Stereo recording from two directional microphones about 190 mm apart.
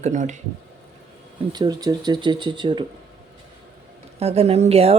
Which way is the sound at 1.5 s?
20° right (ahead or behind).